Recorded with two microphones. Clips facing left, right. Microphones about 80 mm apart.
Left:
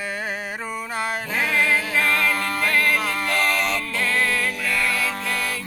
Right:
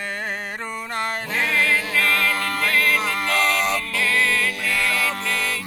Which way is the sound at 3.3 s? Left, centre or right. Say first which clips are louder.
Right 2 dB; centre.